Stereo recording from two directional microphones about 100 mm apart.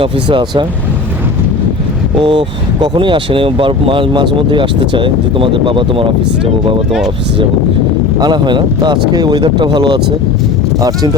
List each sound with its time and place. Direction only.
0.0 s speech: 50° right (ahead or behind)
2.2 s speech: 60° right (ahead or behind)
8.2 s speech: 50° right (ahead or behind)
10.8 s speech: 40° right (ahead or behind)